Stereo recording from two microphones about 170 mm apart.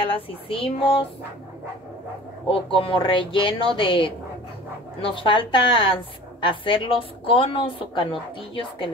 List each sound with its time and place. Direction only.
0.0 s a woman's voice: 30° left (ahead or behind)
2.4 s a woman's voice: 30° left (ahead or behind)